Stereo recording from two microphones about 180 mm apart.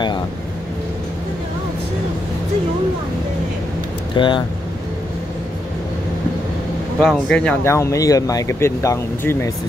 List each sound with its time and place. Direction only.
4.1 s speech: 25° left (ahead or behind)
7.0 s speech: 5° left (ahead or behind)